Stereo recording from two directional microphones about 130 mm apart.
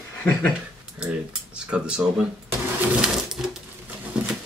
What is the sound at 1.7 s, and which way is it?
Speech, 10° right (ahead or behind).